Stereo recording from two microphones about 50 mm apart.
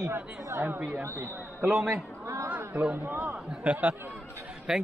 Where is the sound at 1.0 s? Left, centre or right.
Right.